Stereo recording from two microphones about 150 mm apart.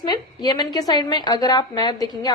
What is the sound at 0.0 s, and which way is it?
A woman's voice, 30° left (ahead or behind).